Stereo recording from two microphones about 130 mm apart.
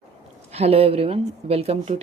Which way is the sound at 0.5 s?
50° right (ahead or behind).